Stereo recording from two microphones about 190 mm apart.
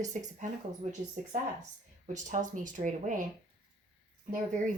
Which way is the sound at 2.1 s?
40° right (ahead or behind).